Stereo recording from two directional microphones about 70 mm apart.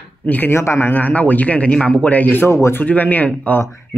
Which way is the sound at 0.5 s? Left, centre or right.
Left.